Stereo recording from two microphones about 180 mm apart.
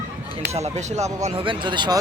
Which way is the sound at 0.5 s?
40° right (ahead or behind).